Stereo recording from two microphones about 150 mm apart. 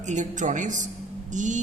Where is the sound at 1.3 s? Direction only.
55° right (ahead or behind).